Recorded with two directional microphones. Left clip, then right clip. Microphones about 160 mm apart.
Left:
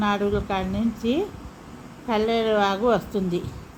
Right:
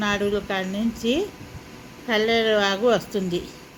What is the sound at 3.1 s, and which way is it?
Speech, 10° left (ahead or behind).